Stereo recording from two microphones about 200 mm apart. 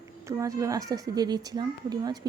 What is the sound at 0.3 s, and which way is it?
Speech, 15° right (ahead or behind).